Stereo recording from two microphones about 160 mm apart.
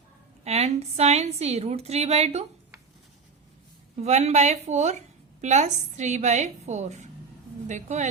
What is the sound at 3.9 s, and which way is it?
A woman's voice, 45° right (ahead or behind).